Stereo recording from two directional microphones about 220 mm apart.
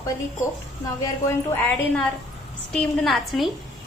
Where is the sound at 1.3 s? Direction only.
10° left (ahead or behind).